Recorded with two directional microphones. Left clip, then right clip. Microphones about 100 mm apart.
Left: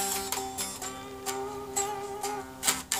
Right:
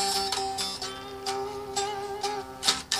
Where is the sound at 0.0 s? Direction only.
15° right (ahead or behind).